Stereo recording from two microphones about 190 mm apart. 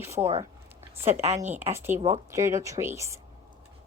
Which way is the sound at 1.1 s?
35° right (ahead or behind).